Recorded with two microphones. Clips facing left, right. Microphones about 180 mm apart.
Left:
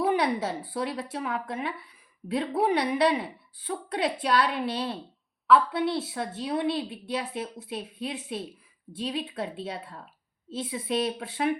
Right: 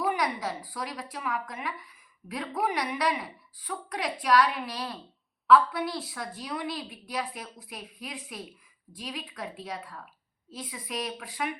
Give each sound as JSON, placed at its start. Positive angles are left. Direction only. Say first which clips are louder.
{"t": 0.0, "sound": "a woman's voice", "louder": "left 4 dB", "side_deg": 30}